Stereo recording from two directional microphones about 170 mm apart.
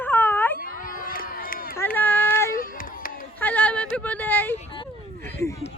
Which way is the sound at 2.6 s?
55° left (ahead or behind).